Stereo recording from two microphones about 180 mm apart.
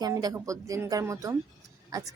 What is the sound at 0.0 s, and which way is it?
Speech, 20° right (ahead or behind).